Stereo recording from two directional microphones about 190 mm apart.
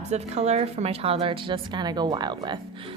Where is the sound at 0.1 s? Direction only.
35° right (ahead or behind).